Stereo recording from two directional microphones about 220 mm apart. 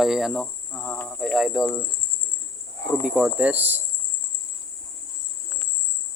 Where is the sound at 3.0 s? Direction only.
5° right (ahead or behind).